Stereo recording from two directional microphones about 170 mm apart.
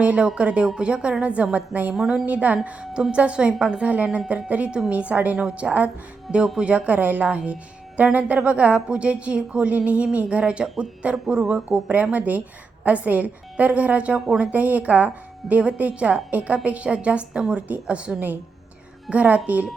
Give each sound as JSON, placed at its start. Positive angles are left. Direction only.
{"t": 0.0, "sound": "speech", "side_deg": -5}